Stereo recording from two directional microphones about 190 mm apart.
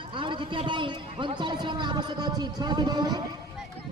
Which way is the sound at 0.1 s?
25° right (ahead or behind).